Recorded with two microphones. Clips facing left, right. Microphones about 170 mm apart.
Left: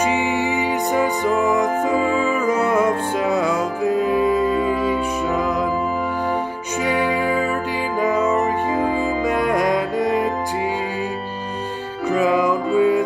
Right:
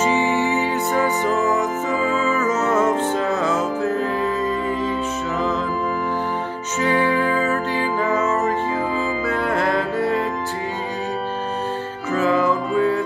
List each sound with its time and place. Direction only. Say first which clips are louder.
0.0 s music: right 1 dB; 15° left (ahead or behind)
6.8 s music: right 1 dB; 10° left (ahead or behind)
12.1 s music: left 1 dB; 15° left (ahead or behind)